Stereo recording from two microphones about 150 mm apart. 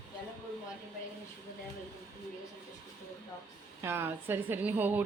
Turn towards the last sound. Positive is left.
turn(degrees=-10)  # may be behind; listen again after turning